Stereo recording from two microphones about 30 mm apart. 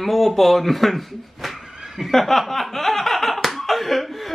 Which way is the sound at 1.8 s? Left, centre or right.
Centre.